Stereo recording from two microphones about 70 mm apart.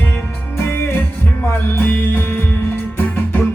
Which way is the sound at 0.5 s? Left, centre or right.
Left.